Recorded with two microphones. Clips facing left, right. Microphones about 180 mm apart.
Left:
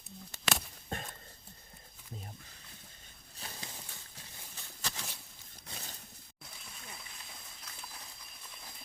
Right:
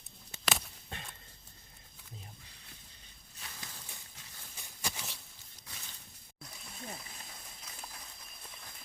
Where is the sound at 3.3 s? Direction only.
35° left (ahead or behind).